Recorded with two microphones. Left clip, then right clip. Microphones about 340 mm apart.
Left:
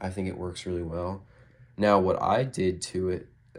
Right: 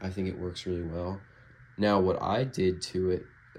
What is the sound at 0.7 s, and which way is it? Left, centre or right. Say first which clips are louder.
Speech: left 2 dB; left.